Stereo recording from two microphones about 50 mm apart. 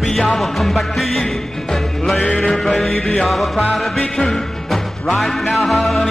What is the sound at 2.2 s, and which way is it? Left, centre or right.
Music, centre.